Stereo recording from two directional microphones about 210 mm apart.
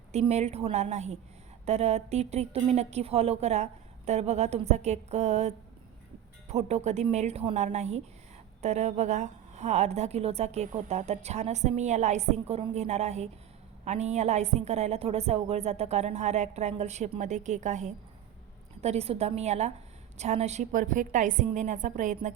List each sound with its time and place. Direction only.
0.1 s a woman's voice: 30° right (ahead or behind)